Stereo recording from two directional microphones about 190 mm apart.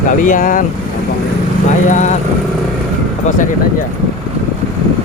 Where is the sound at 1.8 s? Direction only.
40° left (ahead or behind).